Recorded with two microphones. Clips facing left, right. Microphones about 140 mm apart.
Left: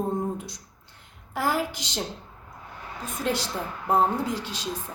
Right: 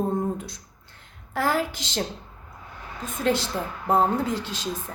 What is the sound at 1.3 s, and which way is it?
Speech, 10° left (ahead or behind).